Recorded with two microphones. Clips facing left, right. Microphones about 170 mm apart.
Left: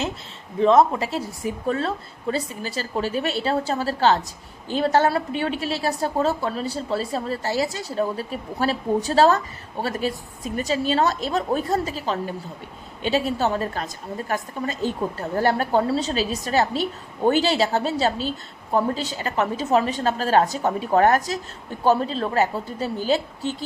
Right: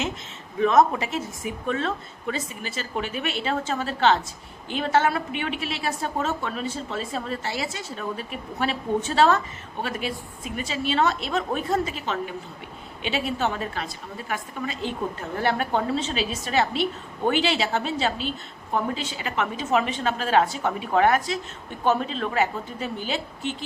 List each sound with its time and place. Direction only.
0.6 s a woman's voice: 30° left (ahead or behind)